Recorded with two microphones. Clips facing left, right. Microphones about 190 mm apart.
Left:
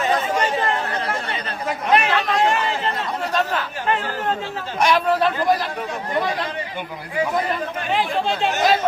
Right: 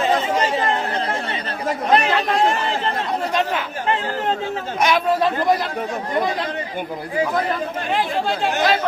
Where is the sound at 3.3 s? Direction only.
10° right (ahead or behind).